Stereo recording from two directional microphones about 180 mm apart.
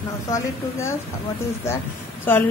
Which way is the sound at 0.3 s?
15° left (ahead or behind).